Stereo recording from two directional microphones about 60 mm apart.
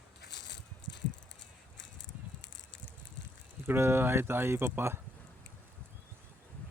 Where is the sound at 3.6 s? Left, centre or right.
Right.